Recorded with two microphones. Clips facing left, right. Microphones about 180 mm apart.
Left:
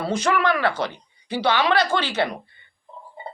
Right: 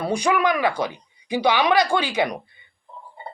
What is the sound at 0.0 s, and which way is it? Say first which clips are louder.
Speech: right 1 dB; 15° right (ahead or behind).